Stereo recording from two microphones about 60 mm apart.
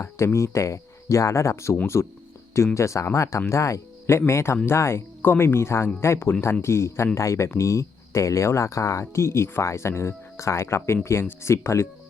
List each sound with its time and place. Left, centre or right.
0.0 s speech: left